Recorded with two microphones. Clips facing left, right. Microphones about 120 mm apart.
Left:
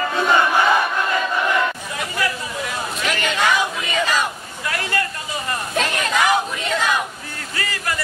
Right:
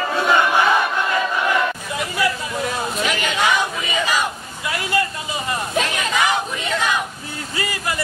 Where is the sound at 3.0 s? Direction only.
5° right (ahead or behind).